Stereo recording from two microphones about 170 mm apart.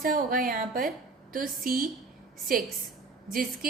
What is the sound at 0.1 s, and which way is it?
A woman's voice, 55° right (ahead or behind).